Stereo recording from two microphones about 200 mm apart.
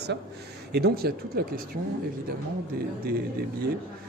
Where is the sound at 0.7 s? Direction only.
55° right (ahead or behind).